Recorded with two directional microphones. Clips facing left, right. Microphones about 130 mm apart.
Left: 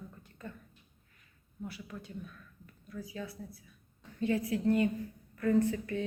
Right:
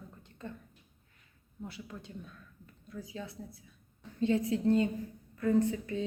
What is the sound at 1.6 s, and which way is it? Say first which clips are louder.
A woman's voice: left 1 dB; 25° right (ahead or behind).